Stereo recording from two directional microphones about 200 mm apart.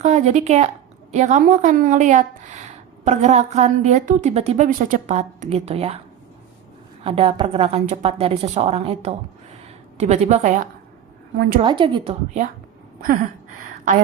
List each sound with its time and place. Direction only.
0.0 s a woman's voice: 35° right (ahead or behind)
7.0 s a woman's voice: 30° right (ahead or behind); by 11.6 s 50° right (ahead or behind)
11.6 s a woman's voice: 25° right (ahead or behind)
13.0 s a sound: 45° right (ahead or behind)